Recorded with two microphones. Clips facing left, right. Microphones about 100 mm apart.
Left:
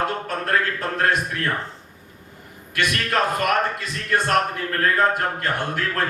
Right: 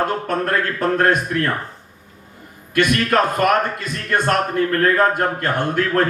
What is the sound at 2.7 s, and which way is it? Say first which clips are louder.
A man's voice: right 6 dB; 50° right (ahead or behind).